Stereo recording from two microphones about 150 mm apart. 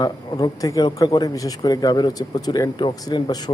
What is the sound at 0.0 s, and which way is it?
Speech, 25° left (ahead or behind).